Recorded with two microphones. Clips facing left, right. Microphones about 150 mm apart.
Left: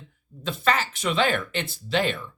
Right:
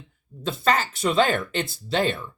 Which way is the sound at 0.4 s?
35° right (ahead or behind).